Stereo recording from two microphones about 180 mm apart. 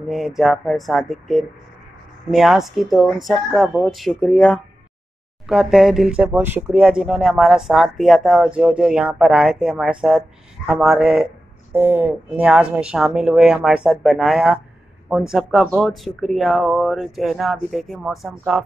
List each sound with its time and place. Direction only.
0.1 s speech: centre (ahead or behind)